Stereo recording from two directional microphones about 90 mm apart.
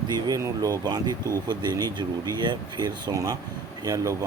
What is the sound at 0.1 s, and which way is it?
Speech, 45° right (ahead or behind).